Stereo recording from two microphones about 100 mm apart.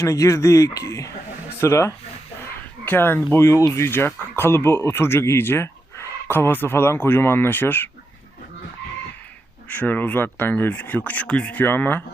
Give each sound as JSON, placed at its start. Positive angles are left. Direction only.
{"t": 0.0, "sound": "speech", "side_deg": 30}
{"t": 9.6, "sound": "speech", "side_deg": 15}